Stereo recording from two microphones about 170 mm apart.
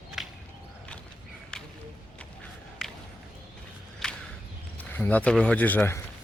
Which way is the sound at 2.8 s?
Centre (ahead or behind).